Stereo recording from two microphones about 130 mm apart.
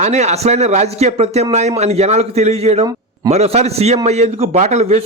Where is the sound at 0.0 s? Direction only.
60° right (ahead or behind).